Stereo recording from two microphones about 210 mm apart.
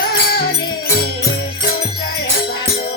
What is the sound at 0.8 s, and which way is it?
Music, 45° left (ahead or behind).